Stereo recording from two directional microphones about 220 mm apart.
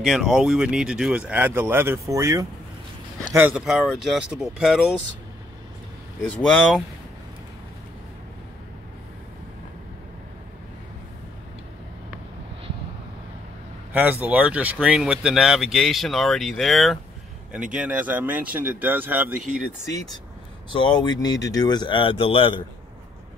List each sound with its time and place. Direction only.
0.0 s speech: centre (ahead or behind)
6.2 s speech: 5° left (ahead or behind)
13.9 s speech: 10° right (ahead or behind)
20.7 s speech: 20° left (ahead or behind)